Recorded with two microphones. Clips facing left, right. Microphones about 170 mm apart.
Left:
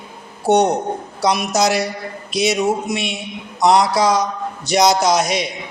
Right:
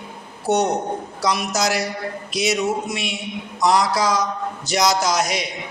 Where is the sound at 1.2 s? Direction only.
20° left (ahead or behind).